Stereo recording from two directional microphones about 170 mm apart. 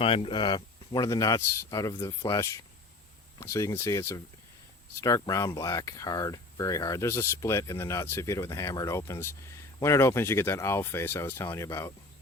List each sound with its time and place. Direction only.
0.0 s speech: 30° left (ahead or behind); by 11.9 s 15° left (ahead or behind)